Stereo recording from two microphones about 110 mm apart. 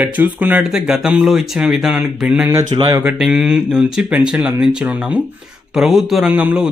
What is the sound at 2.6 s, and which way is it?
Speech, 40° right (ahead or behind).